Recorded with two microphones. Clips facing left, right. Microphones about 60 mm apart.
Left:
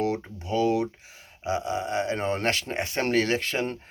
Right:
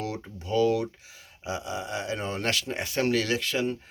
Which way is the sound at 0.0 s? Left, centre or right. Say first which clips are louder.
Left 6 dB; left.